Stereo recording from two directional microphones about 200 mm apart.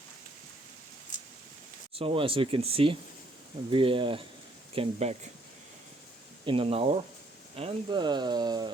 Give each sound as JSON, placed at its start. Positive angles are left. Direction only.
{"t": 2.0, "sound": "speech", "side_deg": -25}
{"t": 6.4, "sound": "speech", "side_deg": -25}